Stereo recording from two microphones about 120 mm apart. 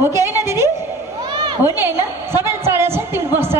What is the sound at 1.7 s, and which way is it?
A woman's voice, 20° right (ahead or behind).